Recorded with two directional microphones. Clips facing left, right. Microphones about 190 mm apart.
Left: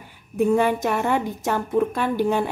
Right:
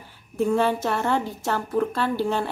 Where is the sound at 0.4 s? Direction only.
15° left (ahead or behind).